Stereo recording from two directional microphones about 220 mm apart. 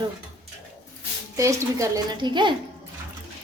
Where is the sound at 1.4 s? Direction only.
15° right (ahead or behind).